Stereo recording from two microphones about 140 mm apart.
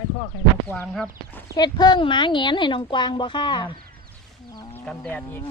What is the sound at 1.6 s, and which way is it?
A woman's voice, 30° left (ahead or behind).